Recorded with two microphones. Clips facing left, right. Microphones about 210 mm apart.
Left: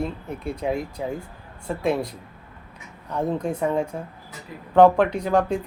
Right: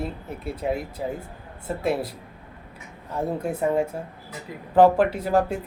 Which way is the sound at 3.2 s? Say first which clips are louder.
Left 1 dB; 5° right (ahead or behind).